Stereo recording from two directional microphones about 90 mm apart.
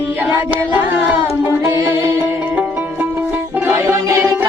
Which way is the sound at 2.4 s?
15° right (ahead or behind).